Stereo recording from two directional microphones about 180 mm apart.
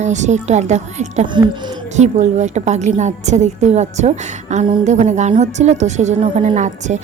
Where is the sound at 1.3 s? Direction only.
25° right (ahead or behind).